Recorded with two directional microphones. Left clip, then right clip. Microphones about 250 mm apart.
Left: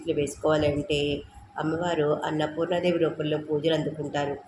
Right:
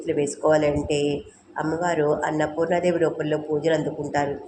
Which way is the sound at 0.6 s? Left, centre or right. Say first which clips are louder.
Right 4 dB; right.